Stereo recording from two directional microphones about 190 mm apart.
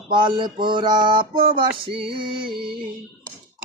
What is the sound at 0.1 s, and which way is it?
Mantra, 25° right (ahead or behind).